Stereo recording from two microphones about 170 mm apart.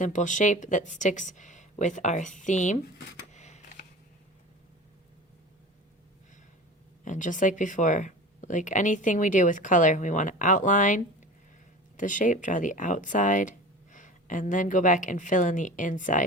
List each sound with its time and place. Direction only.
0.0 s speech: 45° left (ahead or behind)
3.3 s a sound: 40° left (ahead or behind)
7.0 s speech: 50° left (ahead or behind)